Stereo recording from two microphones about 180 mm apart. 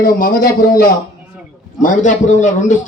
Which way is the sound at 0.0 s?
50° left (ahead or behind).